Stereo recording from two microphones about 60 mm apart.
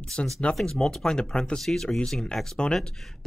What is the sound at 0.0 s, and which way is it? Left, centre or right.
Speech, centre.